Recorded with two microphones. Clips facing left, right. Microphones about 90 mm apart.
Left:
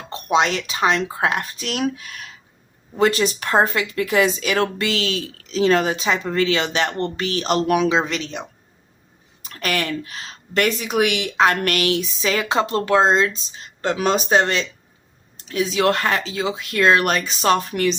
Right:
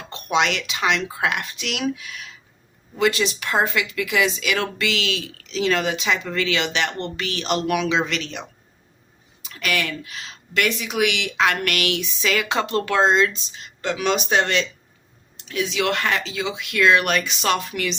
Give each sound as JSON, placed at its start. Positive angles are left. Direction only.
{"t": 0.1, "sound": "speech", "side_deg": 35}
{"t": 9.4, "sound": "speech", "side_deg": 40}